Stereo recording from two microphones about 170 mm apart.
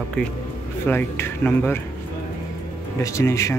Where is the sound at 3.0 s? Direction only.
15° left (ahead or behind).